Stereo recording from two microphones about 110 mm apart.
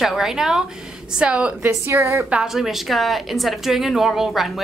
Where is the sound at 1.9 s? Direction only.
25° right (ahead or behind).